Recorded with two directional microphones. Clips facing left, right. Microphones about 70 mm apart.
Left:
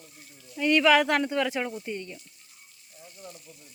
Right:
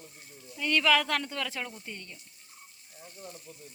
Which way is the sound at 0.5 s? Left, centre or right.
Centre.